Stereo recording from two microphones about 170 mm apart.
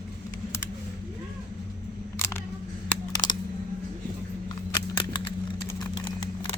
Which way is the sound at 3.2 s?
25° left (ahead or behind).